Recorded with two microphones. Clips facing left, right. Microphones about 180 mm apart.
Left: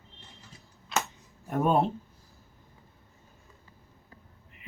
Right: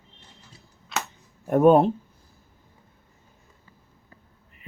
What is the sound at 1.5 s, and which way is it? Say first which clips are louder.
Speech: right 9 dB; 55° right (ahead or behind).